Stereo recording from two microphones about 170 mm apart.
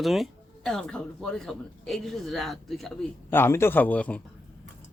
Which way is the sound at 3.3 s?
15° left (ahead or behind).